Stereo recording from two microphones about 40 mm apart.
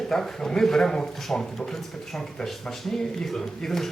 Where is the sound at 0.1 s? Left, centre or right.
Centre.